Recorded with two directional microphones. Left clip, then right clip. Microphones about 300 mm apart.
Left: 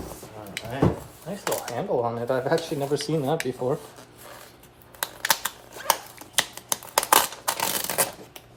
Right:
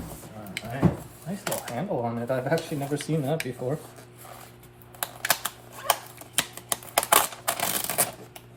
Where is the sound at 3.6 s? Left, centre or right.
Left.